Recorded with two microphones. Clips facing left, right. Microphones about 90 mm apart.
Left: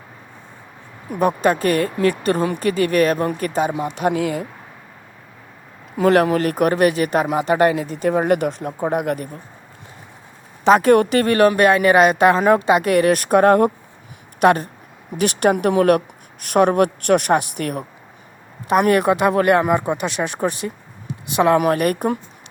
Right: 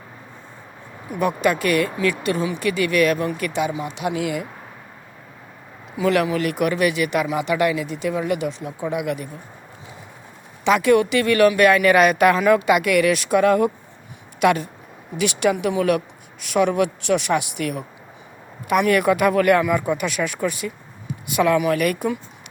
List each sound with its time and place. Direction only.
1.4 s a woman's voice: 35° left (ahead or behind)
3.7 s speech: 50° left (ahead or behind)
6.0 s speech: 45° left (ahead or behind)
10.6 s a woman's voice: 40° left (ahead or behind)
13.1 s a woman's voice: 50° left (ahead or behind)